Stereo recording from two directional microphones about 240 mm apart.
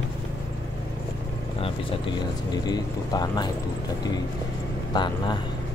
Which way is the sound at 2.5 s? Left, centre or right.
Centre.